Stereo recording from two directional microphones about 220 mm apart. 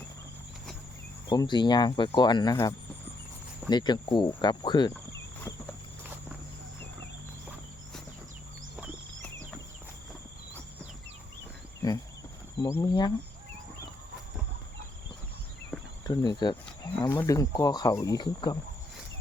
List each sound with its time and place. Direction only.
1.3 s speech: 20° left (ahead or behind)
12.5 s speech: 15° left (ahead or behind)
15.7 s cricket: centre (ahead or behind)
16.0 s speech: 20° left (ahead or behind)